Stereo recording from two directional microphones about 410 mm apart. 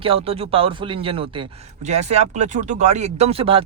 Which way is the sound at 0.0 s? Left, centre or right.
Centre.